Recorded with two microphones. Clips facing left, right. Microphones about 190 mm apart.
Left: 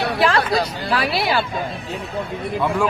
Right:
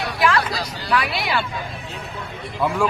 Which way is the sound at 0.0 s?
30° left (ahead or behind).